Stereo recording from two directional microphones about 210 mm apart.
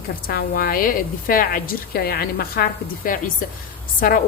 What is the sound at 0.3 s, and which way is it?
A woman's voice, 45° left (ahead or behind).